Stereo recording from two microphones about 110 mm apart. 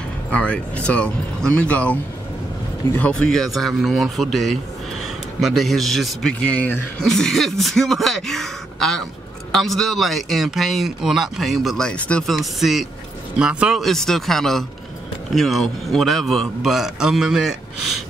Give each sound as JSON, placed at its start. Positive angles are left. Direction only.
{"t": 0.3, "sound": "speech", "side_deg": 10}
{"t": 3.0, "sound": "speech", "side_deg": 10}